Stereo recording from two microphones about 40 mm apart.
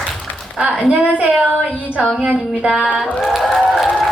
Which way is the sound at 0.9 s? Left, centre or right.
Right.